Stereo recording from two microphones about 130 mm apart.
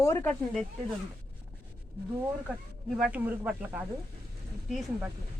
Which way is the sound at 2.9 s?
5° right (ahead or behind).